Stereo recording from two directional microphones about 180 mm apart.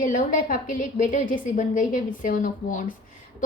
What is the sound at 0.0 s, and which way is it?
A woman's voice, 45° left (ahead or behind).